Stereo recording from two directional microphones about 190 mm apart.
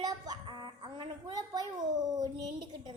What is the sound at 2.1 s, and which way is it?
Speech, 20° right (ahead or behind).